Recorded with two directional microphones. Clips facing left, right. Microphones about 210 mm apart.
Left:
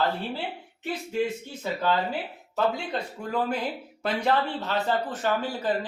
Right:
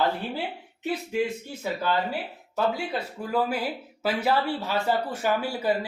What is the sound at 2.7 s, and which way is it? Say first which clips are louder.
A man's voice: right 1 dB; 5° right (ahead or behind).